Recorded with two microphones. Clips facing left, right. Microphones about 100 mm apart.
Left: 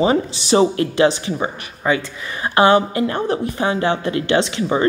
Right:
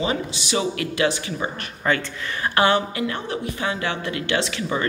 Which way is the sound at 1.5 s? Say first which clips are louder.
Left 3 dB; 10° left (ahead or behind).